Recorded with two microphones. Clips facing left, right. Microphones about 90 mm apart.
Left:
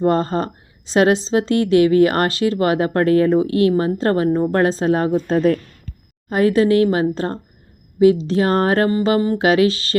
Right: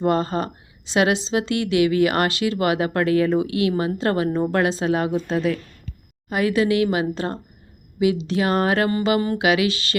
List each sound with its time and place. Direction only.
0.0 s a woman's voice: 35° left (ahead or behind)